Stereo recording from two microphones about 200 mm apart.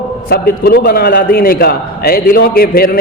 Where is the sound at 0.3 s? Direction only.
50° left (ahead or behind).